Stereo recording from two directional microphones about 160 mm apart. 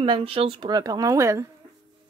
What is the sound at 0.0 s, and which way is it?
Speech, 35° right (ahead or behind).